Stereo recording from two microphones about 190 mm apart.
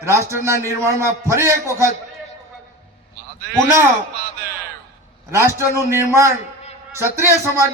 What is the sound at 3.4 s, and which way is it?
Speech, 55° right (ahead or behind).